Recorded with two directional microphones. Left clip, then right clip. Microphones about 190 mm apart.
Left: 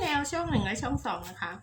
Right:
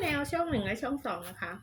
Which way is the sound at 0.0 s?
20° left (ahead or behind).